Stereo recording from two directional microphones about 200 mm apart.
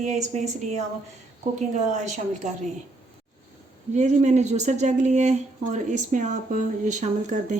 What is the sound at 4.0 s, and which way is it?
A woman's voice, 35° right (ahead or behind).